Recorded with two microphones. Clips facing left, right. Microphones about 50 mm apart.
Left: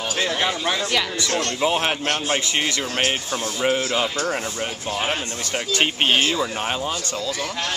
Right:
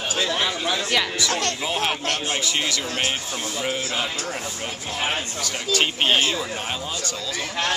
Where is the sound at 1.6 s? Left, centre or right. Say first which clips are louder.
Left 4 dB; centre.